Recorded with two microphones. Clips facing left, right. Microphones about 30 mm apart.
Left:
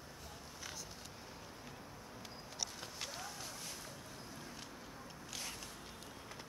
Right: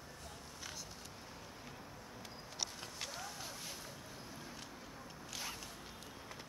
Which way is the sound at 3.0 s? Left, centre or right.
Centre.